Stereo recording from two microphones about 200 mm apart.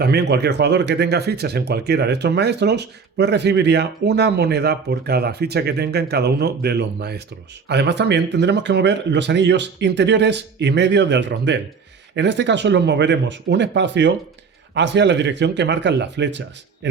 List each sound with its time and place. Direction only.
0.0 s speech: 55° right (ahead or behind)